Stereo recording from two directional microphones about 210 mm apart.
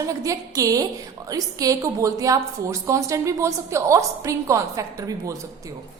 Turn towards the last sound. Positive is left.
turn(degrees=-15)  # may be behind; listen again after turning